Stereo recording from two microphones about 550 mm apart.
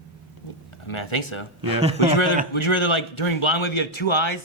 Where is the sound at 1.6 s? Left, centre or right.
Right.